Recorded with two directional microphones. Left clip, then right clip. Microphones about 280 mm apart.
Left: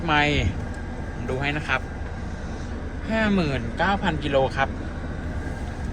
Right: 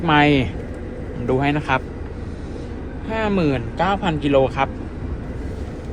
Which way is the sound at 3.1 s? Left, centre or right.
Centre.